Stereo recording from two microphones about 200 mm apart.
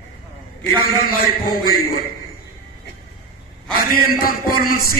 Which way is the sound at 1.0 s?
45° left (ahead or behind).